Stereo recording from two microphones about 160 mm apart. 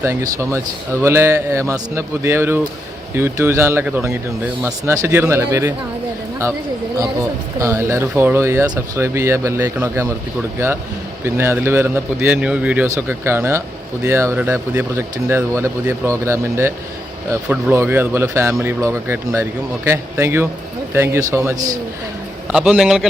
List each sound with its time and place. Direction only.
0.0 s speech: 20° right (ahead or behind)
7.0 s speech: 20° right (ahead or behind)
11.3 s speech: 15° right (ahead or behind)
22.5 s a man's voice: 5° right (ahead or behind)